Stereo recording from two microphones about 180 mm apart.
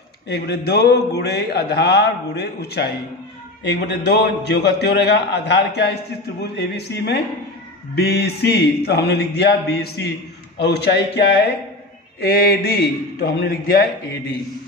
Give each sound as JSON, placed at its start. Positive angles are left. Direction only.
{"t": 0.3, "sound": "a man's voice", "side_deg": 65}